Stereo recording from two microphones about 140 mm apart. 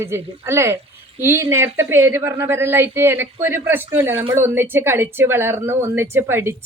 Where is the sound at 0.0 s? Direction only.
20° right (ahead or behind).